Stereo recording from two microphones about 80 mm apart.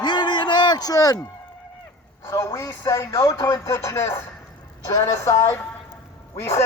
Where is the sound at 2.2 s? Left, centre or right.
Left.